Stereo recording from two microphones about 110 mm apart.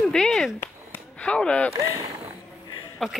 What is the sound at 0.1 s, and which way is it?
Speech, 5° left (ahead or behind).